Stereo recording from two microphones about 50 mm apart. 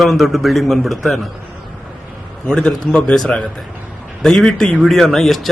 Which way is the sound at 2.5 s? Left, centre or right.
Centre.